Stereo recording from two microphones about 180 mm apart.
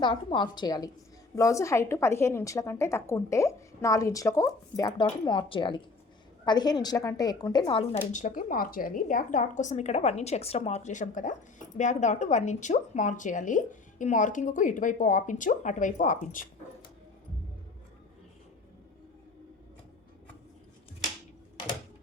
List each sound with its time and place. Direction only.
0.0 s a woman's voice: 25° left (ahead or behind)
7.9 s a woman's voice: 45° left (ahead or behind)